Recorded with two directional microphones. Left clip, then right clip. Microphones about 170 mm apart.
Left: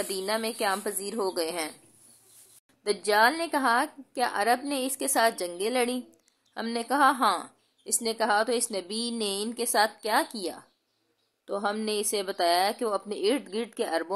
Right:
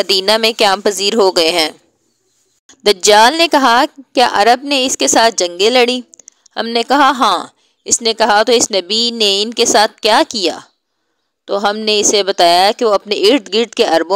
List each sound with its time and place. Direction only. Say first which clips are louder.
0.0 s a woman's voice: right 18 dB; 55° right (ahead or behind)